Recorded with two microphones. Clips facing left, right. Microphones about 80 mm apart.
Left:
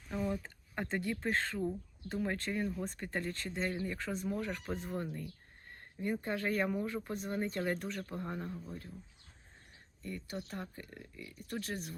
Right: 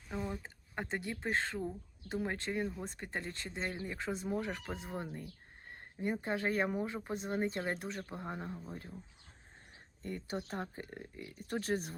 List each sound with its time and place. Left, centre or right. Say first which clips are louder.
0.1 s speech: left 3 dB; centre
5.7 s a sound: even; centre
6.4 s speech: even; right
10.0 s speech: right 2 dB; right